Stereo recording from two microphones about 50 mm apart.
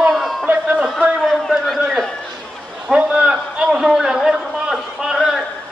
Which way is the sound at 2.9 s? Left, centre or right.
Right.